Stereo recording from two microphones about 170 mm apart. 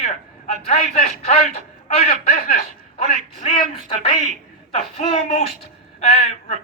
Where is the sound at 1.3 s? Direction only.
40° left (ahead or behind).